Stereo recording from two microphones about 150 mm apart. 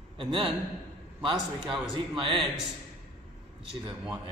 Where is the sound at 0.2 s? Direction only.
30° right (ahead or behind).